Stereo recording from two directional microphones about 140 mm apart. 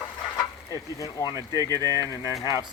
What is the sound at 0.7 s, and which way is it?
Speech, 25° left (ahead or behind).